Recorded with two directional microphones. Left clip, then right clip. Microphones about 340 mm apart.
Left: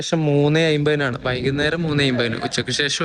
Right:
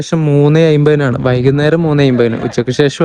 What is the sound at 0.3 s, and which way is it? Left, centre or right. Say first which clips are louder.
Speech: right 8 dB; right.